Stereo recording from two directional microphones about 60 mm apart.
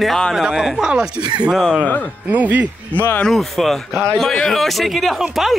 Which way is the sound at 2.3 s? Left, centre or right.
Right.